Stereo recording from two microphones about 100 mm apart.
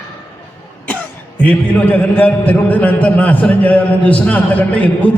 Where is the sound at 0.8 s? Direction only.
15° left (ahead or behind).